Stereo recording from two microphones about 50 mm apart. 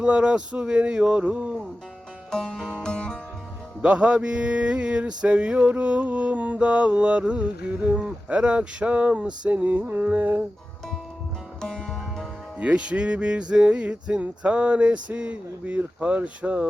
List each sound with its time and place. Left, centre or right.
0.0 s mantra: right
2.3 s music: centre
3.8 s mantra: right
10.1 s music: right
11.6 s music: centre
12.5 s mantra: right